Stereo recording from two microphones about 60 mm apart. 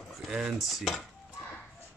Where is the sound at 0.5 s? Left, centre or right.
Centre.